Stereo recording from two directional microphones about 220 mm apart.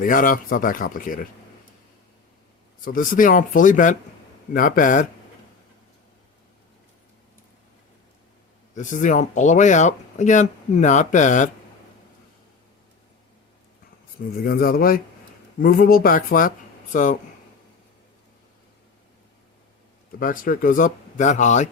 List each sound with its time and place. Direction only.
0.0 s speech: 40° left (ahead or behind)
2.8 s speech: 40° left (ahead or behind)
8.7 s speech: 35° left (ahead or behind)
14.3 s speech: 45° left (ahead or behind)
20.1 s speech: 40° left (ahead or behind)